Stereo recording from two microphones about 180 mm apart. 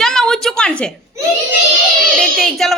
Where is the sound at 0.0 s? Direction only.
5° left (ahead or behind).